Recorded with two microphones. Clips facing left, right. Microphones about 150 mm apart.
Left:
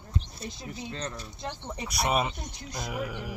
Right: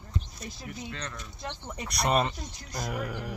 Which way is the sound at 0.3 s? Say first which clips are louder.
Left 1 dB; 30° left (ahead or behind).